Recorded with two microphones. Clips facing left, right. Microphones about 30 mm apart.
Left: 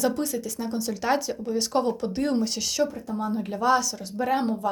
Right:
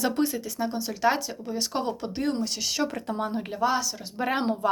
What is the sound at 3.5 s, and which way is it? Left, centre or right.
Speech, centre.